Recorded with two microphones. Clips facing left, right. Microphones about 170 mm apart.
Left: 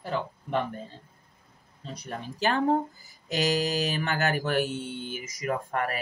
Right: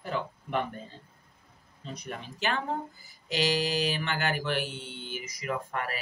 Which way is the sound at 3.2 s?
45° left (ahead or behind).